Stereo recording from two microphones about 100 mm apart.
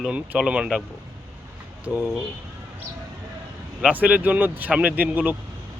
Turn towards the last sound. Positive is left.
turn(degrees=-15)  # may be behind; listen again after turning